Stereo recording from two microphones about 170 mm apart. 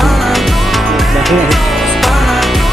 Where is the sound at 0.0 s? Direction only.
Centre (ahead or behind).